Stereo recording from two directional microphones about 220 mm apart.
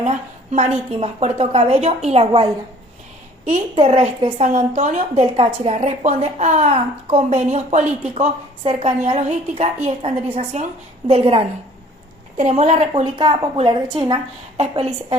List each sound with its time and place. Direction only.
0.0 s a woman's voice: 30° right (ahead or behind)
3.5 s a woman's voice: 30° right (ahead or behind)
14.6 s a woman's voice: 30° right (ahead or behind)